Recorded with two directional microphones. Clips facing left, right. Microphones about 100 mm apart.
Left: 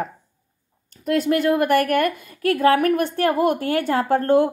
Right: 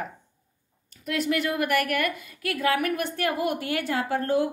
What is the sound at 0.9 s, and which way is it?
A woman's voice, 40° left (ahead or behind).